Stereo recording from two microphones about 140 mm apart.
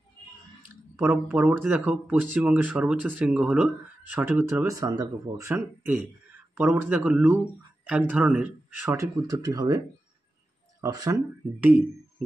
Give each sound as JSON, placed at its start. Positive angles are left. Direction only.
{"t": 0.6, "sound": "a sound", "side_deg": -15}
{"t": 1.7, "sound": "speech", "side_deg": -10}
{"t": 4.7, "sound": "speech", "side_deg": -25}
{"t": 8.8, "sound": "speech", "side_deg": -20}
{"t": 10.8, "sound": "speech", "side_deg": -25}
{"t": 11.6, "sound": "speech", "side_deg": -10}